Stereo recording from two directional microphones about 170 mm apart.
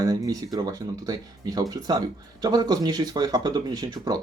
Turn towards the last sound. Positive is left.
turn(degrees=-20)  # may be behind; listen again after turning